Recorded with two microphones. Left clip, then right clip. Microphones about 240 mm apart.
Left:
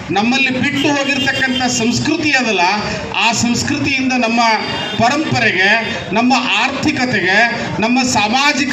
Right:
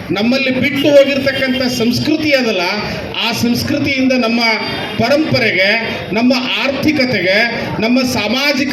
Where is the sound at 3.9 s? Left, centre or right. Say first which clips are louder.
Right 1 dB; left.